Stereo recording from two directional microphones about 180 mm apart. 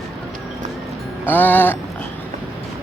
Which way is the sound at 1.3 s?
10° left (ahead or behind).